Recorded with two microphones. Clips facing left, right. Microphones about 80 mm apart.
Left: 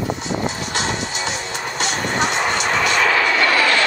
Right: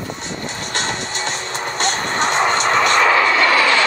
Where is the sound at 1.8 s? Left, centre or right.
Right.